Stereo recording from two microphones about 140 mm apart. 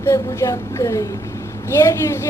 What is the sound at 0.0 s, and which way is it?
Speech, 20° left (ahead or behind).